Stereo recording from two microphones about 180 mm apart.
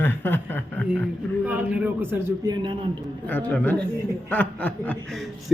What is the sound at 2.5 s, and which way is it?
Speech, 25° right (ahead or behind).